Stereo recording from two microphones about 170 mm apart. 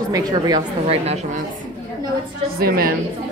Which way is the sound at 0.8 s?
40° right (ahead or behind).